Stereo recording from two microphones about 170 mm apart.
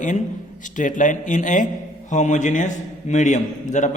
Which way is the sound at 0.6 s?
50° left (ahead or behind).